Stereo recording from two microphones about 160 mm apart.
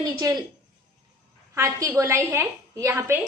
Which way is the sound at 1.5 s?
20° right (ahead or behind).